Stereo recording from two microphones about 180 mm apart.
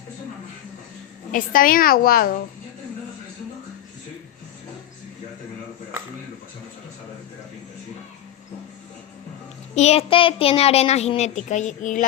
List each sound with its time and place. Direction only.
1.3 s a woman's voice: 50° left (ahead or behind)
9.7 s a child's voice: 35° left (ahead or behind)